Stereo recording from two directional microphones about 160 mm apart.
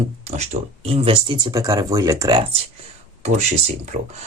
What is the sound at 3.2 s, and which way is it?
Speech, 45° right (ahead or behind).